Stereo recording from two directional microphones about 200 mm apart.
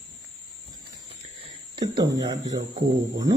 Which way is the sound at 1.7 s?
20° right (ahead or behind).